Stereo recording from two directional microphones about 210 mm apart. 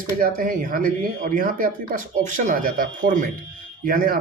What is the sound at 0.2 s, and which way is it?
Speech, 40° right (ahead or behind).